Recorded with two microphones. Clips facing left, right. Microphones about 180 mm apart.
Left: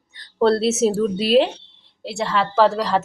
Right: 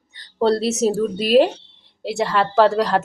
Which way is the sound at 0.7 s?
40° right (ahead or behind).